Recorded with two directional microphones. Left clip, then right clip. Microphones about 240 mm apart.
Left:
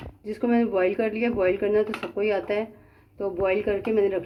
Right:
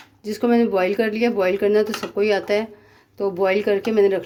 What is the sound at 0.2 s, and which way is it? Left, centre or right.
Speech, right.